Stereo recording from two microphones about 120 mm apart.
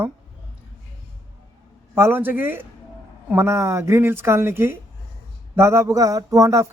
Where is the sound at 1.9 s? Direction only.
20° right (ahead or behind).